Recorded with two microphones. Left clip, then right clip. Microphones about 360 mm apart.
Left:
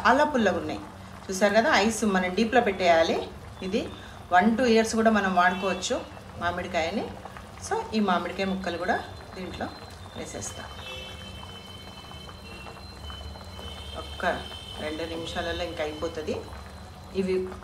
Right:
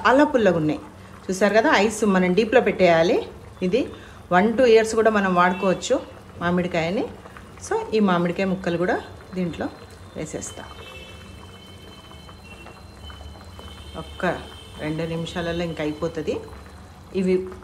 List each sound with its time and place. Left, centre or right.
0.0 s a woman's voice: centre
14.8 s speech: centre